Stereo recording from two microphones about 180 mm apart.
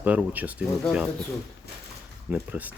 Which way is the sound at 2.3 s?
10° right (ahead or behind).